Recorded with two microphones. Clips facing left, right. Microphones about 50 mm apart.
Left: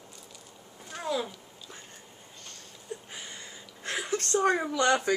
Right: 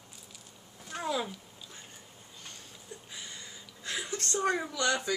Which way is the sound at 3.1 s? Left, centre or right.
Left.